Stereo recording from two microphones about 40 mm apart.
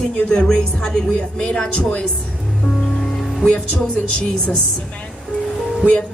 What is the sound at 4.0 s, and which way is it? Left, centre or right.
Speech, left.